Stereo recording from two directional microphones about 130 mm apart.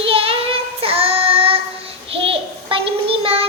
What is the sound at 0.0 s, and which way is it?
Child singing, 45° right (ahead or behind).